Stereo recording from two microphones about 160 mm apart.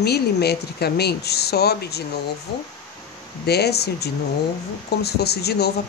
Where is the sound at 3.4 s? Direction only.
90° left.